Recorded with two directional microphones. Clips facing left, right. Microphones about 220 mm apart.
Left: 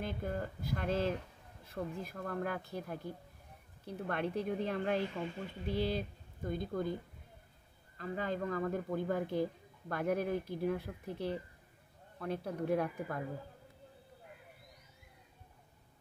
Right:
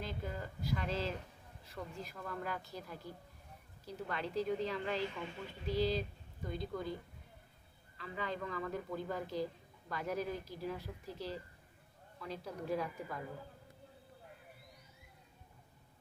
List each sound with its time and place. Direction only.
0.0 s a woman's voice: 55° left (ahead or behind)
8.0 s a woman's voice: 45° left (ahead or behind)